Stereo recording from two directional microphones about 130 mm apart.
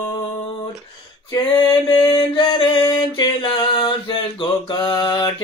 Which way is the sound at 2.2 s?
35° left (ahead or behind).